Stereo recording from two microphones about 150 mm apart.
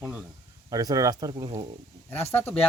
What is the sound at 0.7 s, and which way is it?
Speech, 25° right (ahead or behind).